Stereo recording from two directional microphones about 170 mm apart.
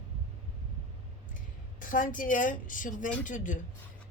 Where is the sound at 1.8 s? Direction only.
50° left (ahead or behind).